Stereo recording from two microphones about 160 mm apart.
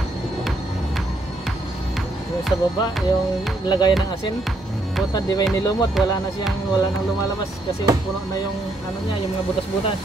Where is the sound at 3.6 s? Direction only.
25° left (ahead or behind).